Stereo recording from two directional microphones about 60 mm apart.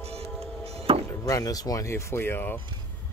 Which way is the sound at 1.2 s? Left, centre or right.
Left.